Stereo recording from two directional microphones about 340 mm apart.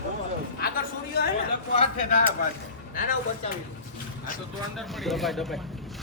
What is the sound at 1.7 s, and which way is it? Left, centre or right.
Speech, left.